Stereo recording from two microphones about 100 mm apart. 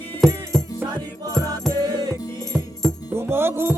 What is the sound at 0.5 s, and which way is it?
Music, 5° left (ahead or behind).